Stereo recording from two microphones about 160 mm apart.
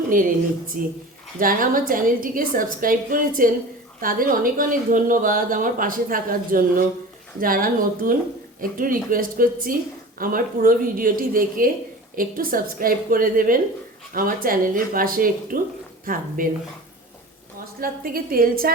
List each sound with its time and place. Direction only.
0.1 s a woman's voice: 60° right (ahead or behind)
17.7 s a woman's voice: 65° right (ahead or behind)